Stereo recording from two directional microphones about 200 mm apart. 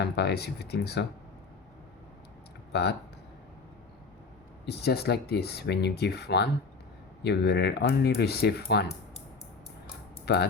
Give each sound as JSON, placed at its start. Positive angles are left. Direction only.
{"t": 0.0, "sound": "speech", "side_deg": 55}
{"t": 2.7, "sound": "speech", "side_deg": 55}
{"t": 4.6, "sound": "speech", "side_deg": 55}
{"t": 10.2, "sound": "speech", "side_deg": 55}